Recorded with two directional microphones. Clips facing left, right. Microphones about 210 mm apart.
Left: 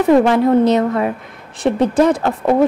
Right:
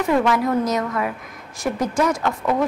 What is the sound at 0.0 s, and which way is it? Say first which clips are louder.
A woman's voice: left 7 dB; 30° left (ahead or behind).